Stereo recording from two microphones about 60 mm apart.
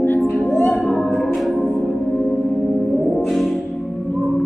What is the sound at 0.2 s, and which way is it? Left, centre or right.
Music, centre.